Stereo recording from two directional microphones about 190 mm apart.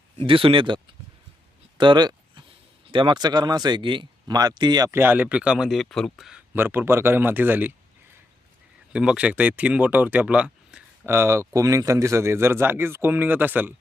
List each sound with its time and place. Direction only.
0.3 s speech: 30° right (ahead or behind)
1.8 s speech: 25° right (ahead or behind)
8.9 s speech: 5° right (ahead or behind)